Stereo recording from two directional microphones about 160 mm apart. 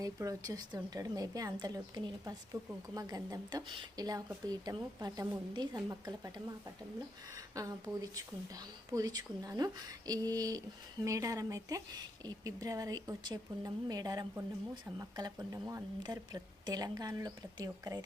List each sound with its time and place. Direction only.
0.0 s a woman's voice: 20° right (ahead or behind)